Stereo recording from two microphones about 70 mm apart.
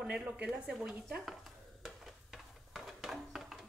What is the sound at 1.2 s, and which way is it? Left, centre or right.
Stir, centre.